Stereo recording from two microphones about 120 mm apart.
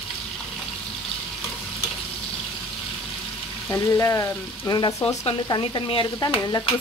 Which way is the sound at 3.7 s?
25° left (ahead or behind).